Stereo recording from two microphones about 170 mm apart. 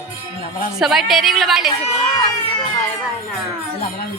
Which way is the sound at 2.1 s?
25° left (ahead or behind).